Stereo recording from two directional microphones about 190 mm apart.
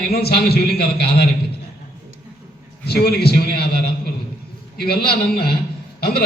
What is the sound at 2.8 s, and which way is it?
Speech, 55° left (ahead or behind).